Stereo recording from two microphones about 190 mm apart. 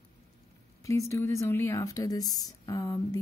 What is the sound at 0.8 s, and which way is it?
Speech, 15° left (ahead or behind).